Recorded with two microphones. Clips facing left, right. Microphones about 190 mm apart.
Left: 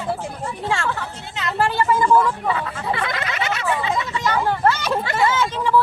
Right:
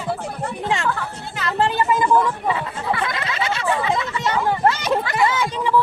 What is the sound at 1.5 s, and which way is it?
Speech, 20° right (ahead or behind).